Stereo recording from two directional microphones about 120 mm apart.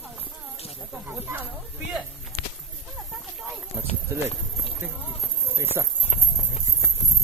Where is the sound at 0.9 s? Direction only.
15° right (ahead or behind).